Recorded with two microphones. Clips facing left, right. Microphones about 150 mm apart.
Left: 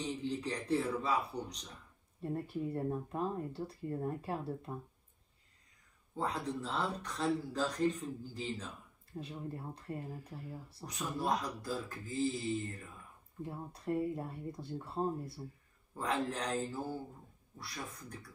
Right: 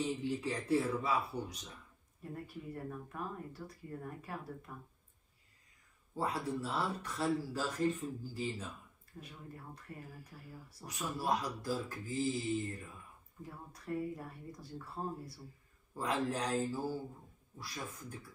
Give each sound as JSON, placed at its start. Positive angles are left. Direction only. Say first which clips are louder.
{"t": 0.0, "sound": "speech", "louder": "right 1 dB", "side_deg": -10}
{"t": 2.2, "sound": "speech", "louder": "left 8 dB", "side_deg": 30}
{"t": 6.1, "sound": "speech", "louder": "even", "side_deg": -10}
{"t": 9.1, "sound": "speech", "louder": "left 8 dB", "side_deg": 30}
{"t": 10.9, "sound": "speech", "louder": "even", "side_deg": -10}
{"t": 13.4, "sound": "speech", "louder": "left 6 dB", "side_deg": 30}
{"t": 15.9, "sound": "a man's voice", "louder": "even", "side_deg": -10}